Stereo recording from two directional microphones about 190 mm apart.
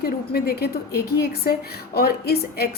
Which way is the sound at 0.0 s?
55° left (ahead or behind).